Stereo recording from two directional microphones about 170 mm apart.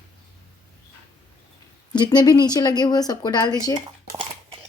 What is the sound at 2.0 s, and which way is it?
A woman's voice, 25° left (ahead or behind).